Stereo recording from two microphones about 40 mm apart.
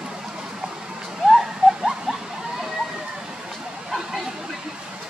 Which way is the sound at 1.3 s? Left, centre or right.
Centre.